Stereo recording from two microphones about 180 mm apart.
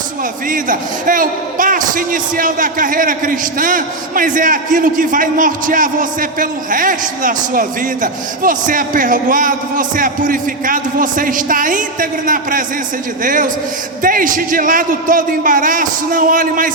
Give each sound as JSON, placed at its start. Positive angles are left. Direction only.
{"t": 0.4, "sound": "a man's voice", "side_deg": -50}